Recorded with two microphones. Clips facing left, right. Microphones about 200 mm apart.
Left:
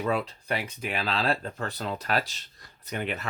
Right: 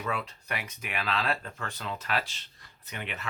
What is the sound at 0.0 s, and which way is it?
Speech, 35° left (ahead or behind).